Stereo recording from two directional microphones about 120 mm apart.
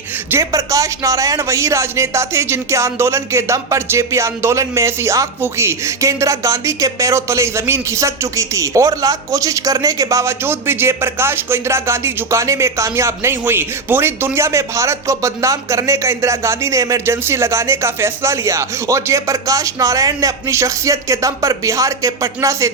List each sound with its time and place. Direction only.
0.3 s speech: 25° right (ahead or behind)